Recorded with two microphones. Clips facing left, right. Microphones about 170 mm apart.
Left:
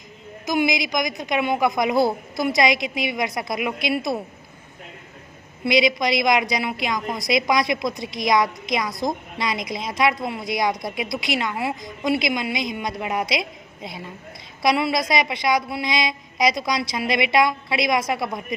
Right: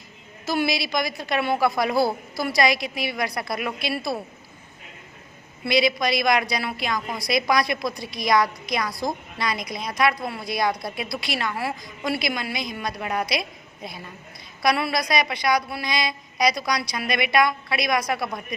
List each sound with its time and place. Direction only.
0.4 s a woman's voice: 15° left (ahead or behind)
5.6 s a woman's voice: 20° left (ahead or behind)